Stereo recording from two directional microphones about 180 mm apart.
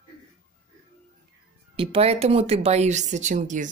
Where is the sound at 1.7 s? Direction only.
30° right (ahead or behind).